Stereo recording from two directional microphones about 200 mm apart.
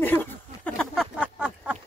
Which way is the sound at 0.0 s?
10° left (ahead or behind).